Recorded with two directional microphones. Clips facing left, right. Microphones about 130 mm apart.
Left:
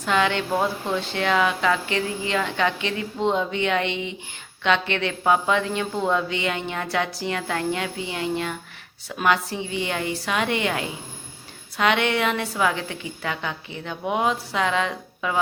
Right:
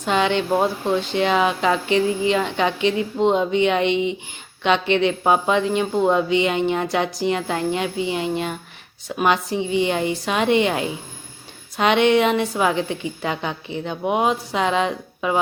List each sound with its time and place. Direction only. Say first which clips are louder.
0.0 s speech: right 3 dB; 20° right (ahead or behind)